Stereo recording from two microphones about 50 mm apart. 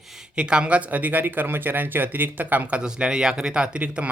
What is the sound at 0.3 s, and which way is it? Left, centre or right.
Speech, centre.